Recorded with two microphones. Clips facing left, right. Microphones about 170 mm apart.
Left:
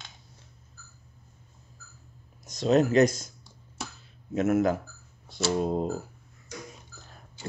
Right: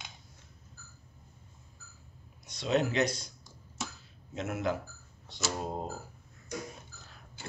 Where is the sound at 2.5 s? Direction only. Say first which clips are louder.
Left 7 dB; 40° left (ahead or behind).